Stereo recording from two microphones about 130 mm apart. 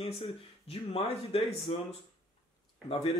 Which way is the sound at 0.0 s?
45° left (ahead or behind).